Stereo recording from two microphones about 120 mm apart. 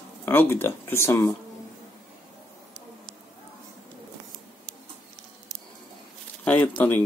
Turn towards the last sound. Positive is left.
turn(degrees=15)  # may be behind; listen again after turning